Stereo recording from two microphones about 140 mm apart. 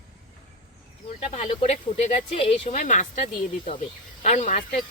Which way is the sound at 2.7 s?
65° left (ahead or behind).